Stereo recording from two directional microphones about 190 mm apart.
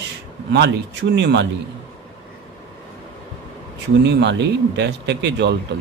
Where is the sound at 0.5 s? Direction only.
65° right (ahead or behind).